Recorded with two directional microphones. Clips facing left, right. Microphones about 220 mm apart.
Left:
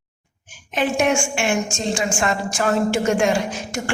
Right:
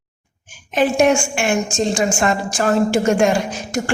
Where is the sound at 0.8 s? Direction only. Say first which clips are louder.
Right 4 dB; 40° right (ahead or behind).